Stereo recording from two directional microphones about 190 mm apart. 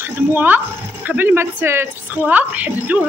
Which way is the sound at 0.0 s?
10° right (ahead or behind).